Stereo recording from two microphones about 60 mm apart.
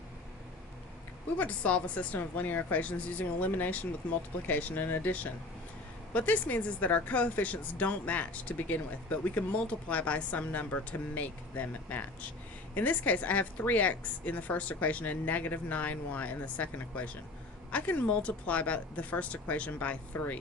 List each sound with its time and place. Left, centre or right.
1.4 s speech: left